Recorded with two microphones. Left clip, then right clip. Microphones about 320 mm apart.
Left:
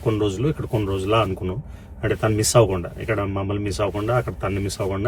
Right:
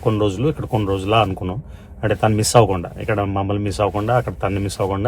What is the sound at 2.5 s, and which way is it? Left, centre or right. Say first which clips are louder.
Speech: right 2 dB; centre.